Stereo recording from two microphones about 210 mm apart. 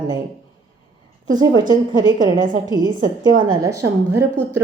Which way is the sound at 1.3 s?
20° right (ahead or behind).